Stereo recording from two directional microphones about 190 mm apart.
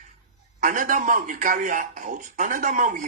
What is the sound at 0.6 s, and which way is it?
A man's voice, 45° right (ahead or behind).